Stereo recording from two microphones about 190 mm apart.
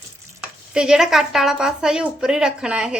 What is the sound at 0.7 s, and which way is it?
A woman's voice, 5° right (ahead or behind).